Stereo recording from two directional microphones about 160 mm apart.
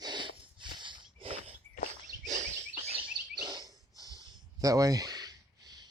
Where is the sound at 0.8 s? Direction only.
30° right (ahead or behind).